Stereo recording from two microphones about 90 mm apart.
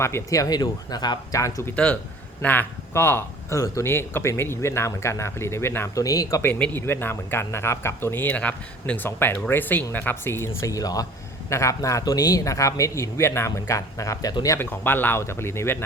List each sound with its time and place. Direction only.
0.0 s a man's voice: 35° left (ahead or behind); by 1.4 s 50° left (ahead or behind)
1.4 s a man's voice: 35° left (ahead or behind)
1.7 s a man's voice: 15° left (ahead or behind)
6.0 s a man's voice: 40° left (ahead or behind)
6.4 s a man's voice: 20° left (ahead or behind); by 14.3 s 40° left (ahead or behind)
14.6 s speech: 20° left (ahead or behind)